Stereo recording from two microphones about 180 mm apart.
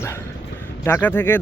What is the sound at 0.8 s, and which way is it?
Speech, 10° left (ahead or behind).